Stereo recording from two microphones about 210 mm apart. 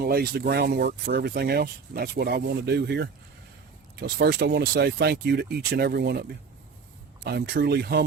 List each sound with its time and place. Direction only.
0.0 s speech: 45° right (ahead or behind)
7.3 s speech: 50° right (ahead or behind)